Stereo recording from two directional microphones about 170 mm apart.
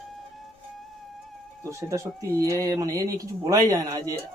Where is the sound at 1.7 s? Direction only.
15° right (ahead or behind).